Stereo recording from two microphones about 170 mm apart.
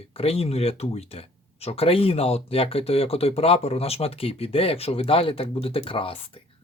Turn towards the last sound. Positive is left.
turn(degrees=30)  # may be behind; listen again after turning